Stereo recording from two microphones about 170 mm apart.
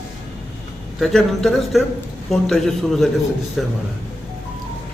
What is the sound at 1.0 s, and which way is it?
A man's voice, centre (ahead or behind).